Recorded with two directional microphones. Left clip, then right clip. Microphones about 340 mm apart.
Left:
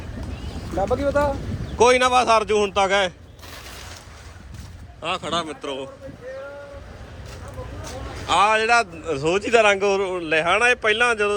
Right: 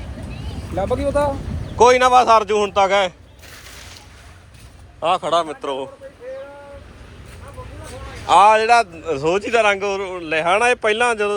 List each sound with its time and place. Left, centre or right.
0.8 s speech: right
1.8 s a man's voice: centre
4.9 s a man's voice: centre
8.3 s a man's voice: centre